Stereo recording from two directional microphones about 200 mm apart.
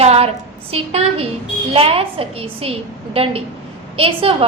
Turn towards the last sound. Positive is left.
turn(degrees=-30)  # may be behind; listen again after turning